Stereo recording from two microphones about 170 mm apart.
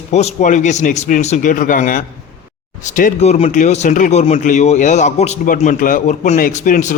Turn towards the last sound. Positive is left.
turn(degrees=50)  # may be behind; listen again after turning